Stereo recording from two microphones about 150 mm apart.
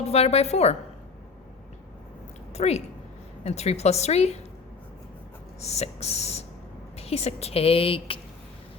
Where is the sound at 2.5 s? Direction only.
45° left (ahead or behind).